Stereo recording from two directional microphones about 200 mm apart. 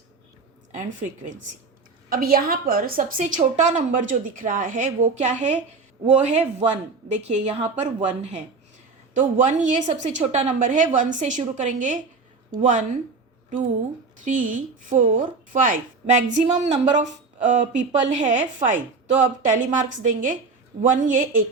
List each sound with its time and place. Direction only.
0.7 s speech: 40° right (ahead or behind)
2.0 s a woman's voice: 45° right (ahead or behind)
14.3 s speech: 40° right (ahead or behind)